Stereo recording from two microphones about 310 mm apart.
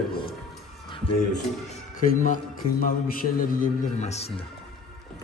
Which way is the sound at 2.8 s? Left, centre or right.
Left.